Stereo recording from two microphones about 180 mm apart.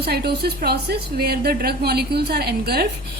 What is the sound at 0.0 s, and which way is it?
A woman's voice, 60° right (ahead or behind).